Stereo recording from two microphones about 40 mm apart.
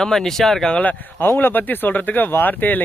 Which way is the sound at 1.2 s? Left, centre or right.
Left.